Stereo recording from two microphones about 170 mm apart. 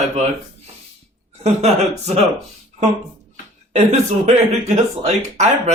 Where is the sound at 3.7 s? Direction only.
40° right (ahead or behind).